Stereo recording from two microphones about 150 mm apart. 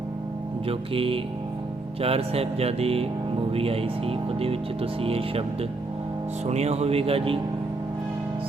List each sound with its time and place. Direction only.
0.7 s speech: 40° right (ahead or behind)